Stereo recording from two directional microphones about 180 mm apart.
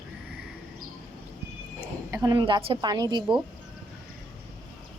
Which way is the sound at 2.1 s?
20° right (ahead or behind).